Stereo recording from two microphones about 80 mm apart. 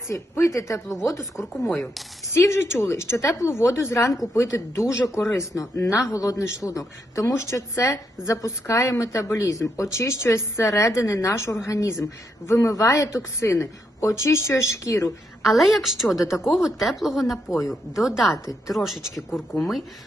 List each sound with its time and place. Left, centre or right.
0.1 s speech: left
1.7 s speech: centre
2.4 s speech: left
15.5 s speech: centre
16.0 s a woman's voice: left
16.4 s speech: centre